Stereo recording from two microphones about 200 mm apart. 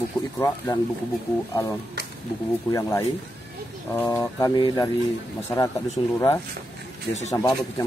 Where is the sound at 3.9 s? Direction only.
15° left (ahead or behind).